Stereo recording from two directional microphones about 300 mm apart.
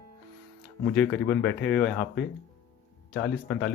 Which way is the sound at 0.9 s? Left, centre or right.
Centre.